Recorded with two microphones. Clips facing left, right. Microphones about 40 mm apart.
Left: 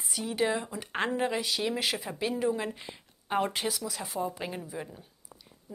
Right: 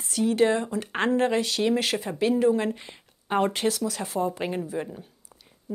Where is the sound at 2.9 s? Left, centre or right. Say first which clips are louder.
Right 4 dB; centre.